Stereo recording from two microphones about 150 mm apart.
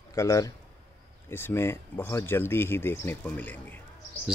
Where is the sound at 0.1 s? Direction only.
20° left (ahead or behind).